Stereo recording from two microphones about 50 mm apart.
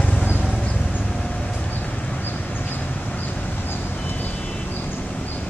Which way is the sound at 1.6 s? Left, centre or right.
Left.